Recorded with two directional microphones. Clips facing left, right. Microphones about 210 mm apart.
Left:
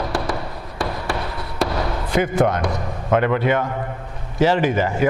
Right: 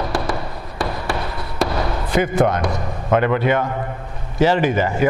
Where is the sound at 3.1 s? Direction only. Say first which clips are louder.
Right 1 dB; 15° right (ahead or behind).